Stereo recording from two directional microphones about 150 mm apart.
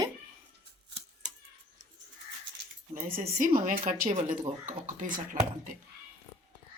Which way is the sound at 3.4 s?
70° right (ahead or behind).